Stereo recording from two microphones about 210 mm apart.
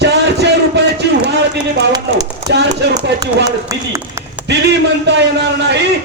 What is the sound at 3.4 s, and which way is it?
Speech, 15° right (ahead or behind).